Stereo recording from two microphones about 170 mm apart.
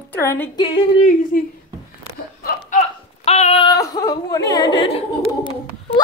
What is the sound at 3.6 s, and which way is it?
Speech, 20° left (ahead or behind).